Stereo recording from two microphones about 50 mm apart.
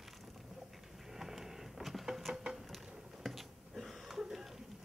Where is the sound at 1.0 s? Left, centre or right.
Centre.